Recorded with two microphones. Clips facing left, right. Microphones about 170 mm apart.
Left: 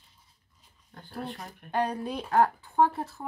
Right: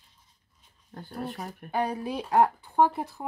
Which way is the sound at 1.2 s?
Centre (ahead or behind).